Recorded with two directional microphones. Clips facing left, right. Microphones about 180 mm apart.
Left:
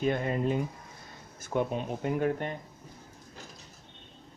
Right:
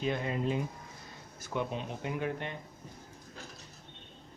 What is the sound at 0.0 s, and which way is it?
Speech, 50° left (ahead or behind).